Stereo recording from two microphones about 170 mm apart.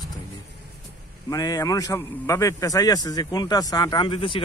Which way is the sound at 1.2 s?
20° left (ahead or behind).